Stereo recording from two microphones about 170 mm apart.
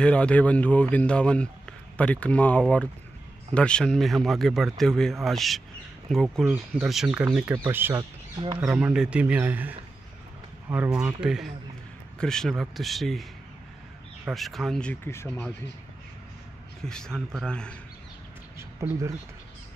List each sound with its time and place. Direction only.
0.0 s speech: 5° left (ahead or behind)
7.5 s speech: 15° right (ahead or behind); by 15.5 s 15° left (ahead or behind)
16.8 s speech: 5° left (ahead or behind)
18.6 s speech: 20° right (ahead or behind)